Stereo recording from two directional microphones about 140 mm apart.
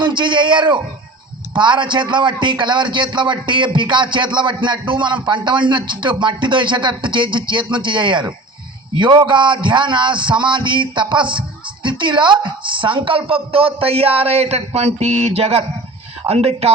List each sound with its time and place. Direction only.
0.0 s a man's voice: 35° right (ahead or behind)